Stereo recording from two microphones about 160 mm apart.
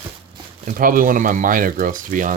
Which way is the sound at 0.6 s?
60° right (ahead or behind).